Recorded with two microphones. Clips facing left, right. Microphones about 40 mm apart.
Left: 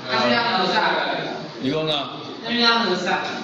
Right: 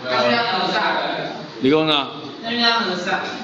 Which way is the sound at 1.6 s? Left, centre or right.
Right.